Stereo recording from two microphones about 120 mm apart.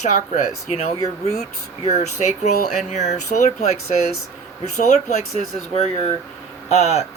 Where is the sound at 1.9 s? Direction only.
70° left (ahead or behind).